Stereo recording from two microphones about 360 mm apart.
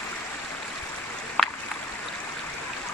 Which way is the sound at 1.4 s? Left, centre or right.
Centre.